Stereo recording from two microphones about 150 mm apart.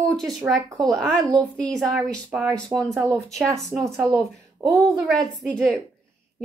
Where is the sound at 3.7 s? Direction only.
20° right (ahead or behind).